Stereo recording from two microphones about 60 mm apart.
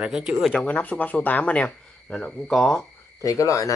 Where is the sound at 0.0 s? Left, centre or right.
Centre.